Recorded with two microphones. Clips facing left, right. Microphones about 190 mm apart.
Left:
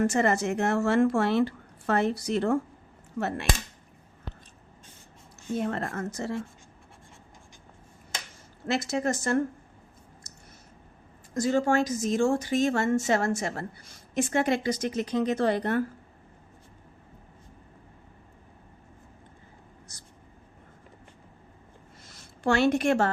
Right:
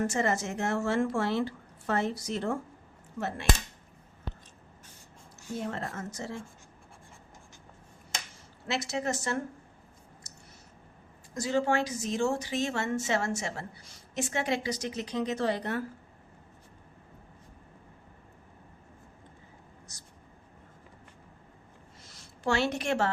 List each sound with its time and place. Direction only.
0.1 s a woman's voice: 65° left (ahead or behind)
5.5 s a woman's voice: 60° left (ahead or behind)
8.6 s speech: 50° left (ahead or behind)
10.3 s clicking: 50° left (ahead or behind)
11.3 s speech: 50° left (ahead or behind)
22.1 s a woman's voice: 55° left (ahead or behind)